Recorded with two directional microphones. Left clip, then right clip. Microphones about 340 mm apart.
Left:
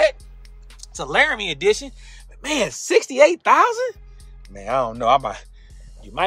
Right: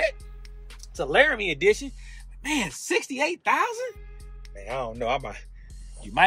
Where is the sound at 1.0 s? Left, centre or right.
Left.